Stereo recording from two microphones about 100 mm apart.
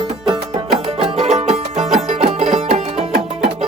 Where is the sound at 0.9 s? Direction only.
85° right.